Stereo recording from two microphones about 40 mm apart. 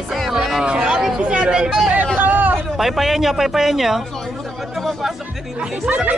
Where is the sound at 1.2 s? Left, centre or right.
Right.